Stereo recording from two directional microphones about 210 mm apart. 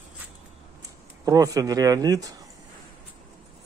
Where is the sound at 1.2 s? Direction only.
15° right (ahead or behind).